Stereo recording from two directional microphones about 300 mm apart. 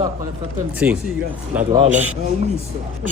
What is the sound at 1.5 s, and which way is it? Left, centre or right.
Speech, centre.